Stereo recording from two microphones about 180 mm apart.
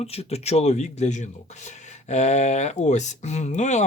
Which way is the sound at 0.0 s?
35° left (ahead or behind).